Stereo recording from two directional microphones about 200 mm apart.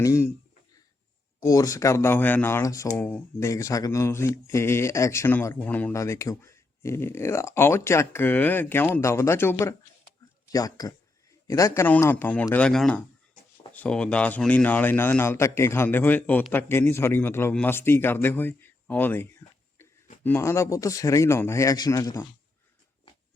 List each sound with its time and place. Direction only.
0.0 s speech: 15° left (ahead or behind)
1.4 s speech: 15° left (ahead or behind)